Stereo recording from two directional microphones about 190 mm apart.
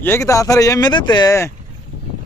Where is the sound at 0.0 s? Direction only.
15° left (ahead or behind).